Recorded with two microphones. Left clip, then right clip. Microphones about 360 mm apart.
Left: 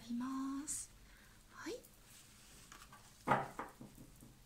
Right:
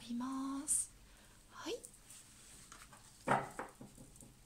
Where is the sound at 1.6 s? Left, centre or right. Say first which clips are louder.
Right 2 dB; centre.